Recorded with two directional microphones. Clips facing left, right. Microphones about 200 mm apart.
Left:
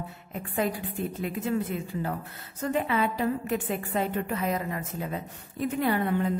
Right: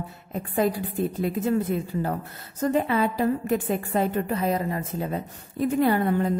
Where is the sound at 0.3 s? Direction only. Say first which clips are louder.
Right 5 dB; 35° right (ahead or behind).